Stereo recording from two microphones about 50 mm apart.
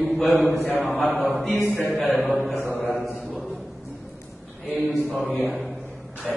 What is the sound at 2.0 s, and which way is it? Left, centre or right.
Speech, left.